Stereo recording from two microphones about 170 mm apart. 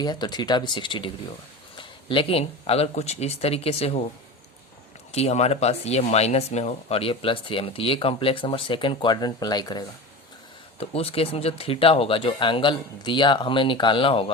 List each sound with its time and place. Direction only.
0.0 s speech: 25° left (ahead or behind)
5.1 s speech: 40° left (ahead or behind)
10.8 s speech: 35° left (ahead or behind)